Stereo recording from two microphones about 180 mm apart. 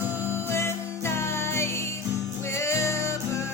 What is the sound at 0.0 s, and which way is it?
Music, 10° right (ahead or behind).